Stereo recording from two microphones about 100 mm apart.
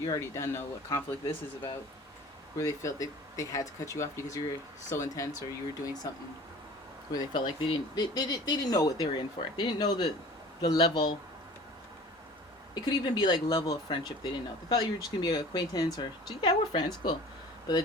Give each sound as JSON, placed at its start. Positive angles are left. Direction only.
{"t": 0.0, "sound": "speech", "side_deg": 35}
{"t": 2.6, "sound": "speech", "side_deg": 30}
{"t": 7.1, "sound": "speech", "side_deg": 45}
{"t": 12.7, "sound": "speech", "side_deg": 45}